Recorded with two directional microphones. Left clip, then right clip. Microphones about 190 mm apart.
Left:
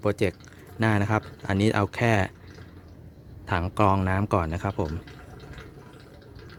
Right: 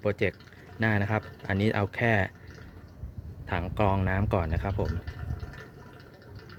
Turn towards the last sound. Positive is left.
turn(degrees=15)  # may be behind; listen again after turning